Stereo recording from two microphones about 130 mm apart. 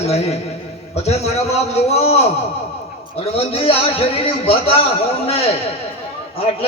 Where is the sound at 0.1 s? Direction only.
55° left (ahead or behind).